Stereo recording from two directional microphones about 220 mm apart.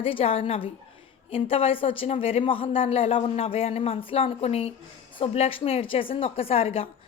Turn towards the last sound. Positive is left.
turn(degrees=25)  # may be behind; listen again after turning